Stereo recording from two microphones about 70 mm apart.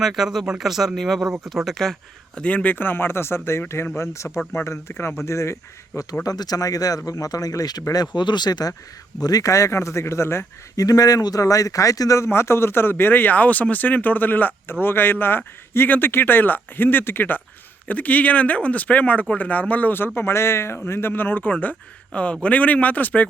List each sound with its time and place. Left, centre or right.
0.0 s speech: centre
2.4 s speech: centre; by 5.5 s left
6.2 s speech: left
9.2 s speech: left
10.8 s a man's voice: left
20.1 s a man's voice: left